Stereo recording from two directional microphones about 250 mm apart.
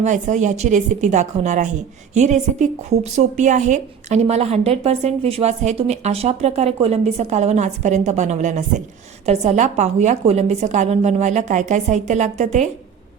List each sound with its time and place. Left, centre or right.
0.0 s a woman's voice: right